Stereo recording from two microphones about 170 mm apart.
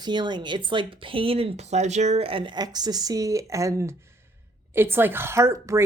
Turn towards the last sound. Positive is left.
turn(degrees=-15)  # may be behind; listen again after turning